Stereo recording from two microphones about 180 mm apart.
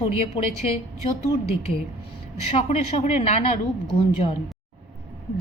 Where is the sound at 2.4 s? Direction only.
35° left (ahead or behind).